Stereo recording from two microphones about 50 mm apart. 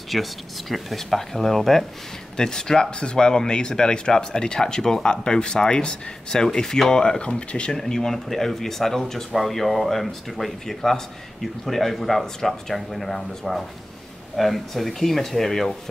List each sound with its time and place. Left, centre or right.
0.1 s speech: centre; by 7.7 s left
7.7 s speech: centre